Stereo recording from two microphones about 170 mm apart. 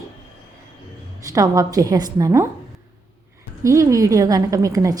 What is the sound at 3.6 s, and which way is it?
A woman's voice, 20° right (ahead or behind).